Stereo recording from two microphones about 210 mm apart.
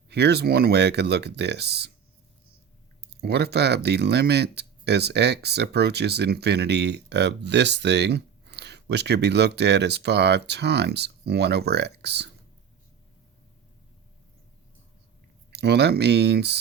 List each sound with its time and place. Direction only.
0.1 s speech: 50° right (ahead or behind)
3.0 s speech: 50° right (ahead or behind)
15.5 s speech: 50° right (ahead or behind)